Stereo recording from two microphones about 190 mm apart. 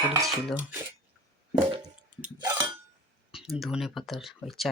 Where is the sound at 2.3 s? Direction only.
20° right (ahead or behind).